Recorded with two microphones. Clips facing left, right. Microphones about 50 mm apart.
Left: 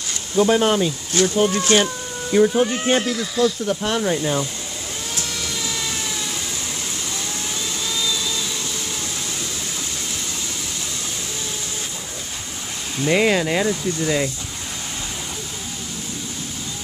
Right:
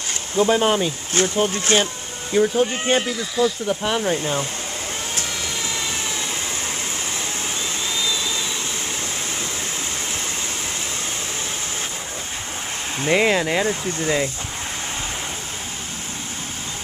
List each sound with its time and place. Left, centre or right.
0.5 s speech: centre
1.1 s speech: right
2.3 s speech: centre
3.0 s speech: centre
4.2 s speech: right
5.1 s vacuum cleaner: right
7.9 s vacuum cleaner: right
13.1 s speech: centre
13.7 s speech: right